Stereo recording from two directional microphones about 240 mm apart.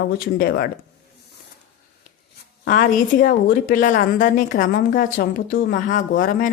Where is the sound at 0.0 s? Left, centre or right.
Left.